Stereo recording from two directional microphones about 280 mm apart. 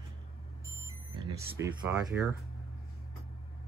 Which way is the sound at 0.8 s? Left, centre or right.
Centre.